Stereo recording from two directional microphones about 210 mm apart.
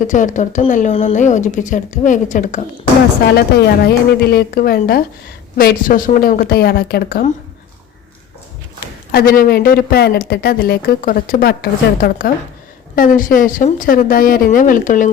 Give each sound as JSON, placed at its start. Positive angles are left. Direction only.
{"t": 0.0, "sound": "speech", "side_deg": 35}
{"t": 3.3, "sound": "speech", "side_deg": 50}
{"t": 9.1, "sound": "speech", "side_deg": 45}